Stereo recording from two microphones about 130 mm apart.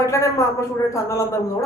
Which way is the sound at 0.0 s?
25° left (ahead or behind).